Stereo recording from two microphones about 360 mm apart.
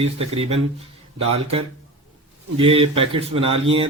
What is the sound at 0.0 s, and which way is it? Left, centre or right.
Speech, centre.